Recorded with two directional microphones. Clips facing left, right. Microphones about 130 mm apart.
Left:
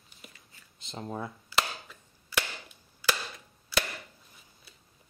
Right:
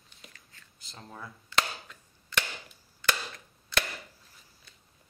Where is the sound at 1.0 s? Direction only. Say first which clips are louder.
Left 9 dB; 30° left (ahead or behind).